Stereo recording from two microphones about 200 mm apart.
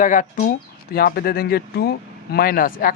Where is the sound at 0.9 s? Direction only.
50° left (ahead or behind).